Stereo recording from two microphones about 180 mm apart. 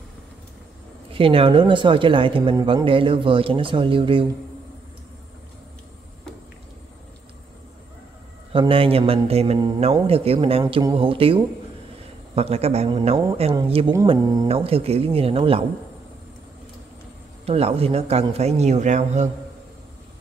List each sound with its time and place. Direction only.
1.1 s a woman's voice: 30° right (ahead or behind)
8.5 s a man's voice: 30° right (ahead or behind)
10.7 s a woman's voice: 20° right (ahead or behind)
11.0 s a woman's voice: 30° right (ahead or behind)
14.5 s a man's voice: 35° right (ahead or behind)
17.5 s a man's voice: 35° right (ahead or behind)